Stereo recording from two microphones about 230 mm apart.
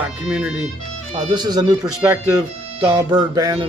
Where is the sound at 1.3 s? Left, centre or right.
Centre.